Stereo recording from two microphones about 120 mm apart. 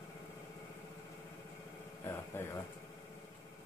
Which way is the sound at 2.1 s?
20° left (ahead or behind).